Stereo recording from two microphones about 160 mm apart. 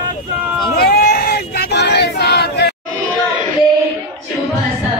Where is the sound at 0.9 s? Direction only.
75° left (ahead or behind).